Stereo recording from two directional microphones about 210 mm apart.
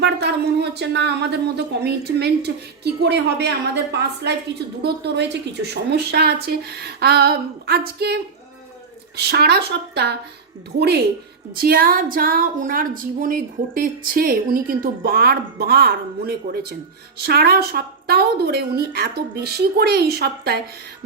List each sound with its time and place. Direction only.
0.0 s a woman's voice: 55° right (ahead or behind)